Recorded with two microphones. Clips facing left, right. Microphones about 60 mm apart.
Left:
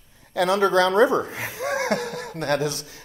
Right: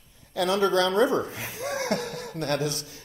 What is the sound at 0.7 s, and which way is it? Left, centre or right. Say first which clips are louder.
A man's voice: left 4 dB; left.